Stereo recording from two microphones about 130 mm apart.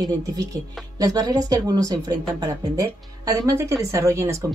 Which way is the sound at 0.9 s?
30° right (ahead or behind).